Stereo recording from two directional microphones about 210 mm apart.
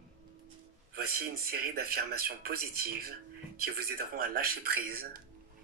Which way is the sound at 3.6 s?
45° right (ahead or behind).